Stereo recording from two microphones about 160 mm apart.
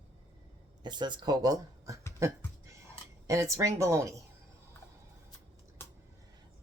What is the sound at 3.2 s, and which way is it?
Speech, 20° right (ahead or behind).